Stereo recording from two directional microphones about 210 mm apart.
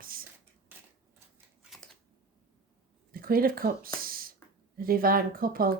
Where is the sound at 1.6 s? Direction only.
Centre (ahead or behind).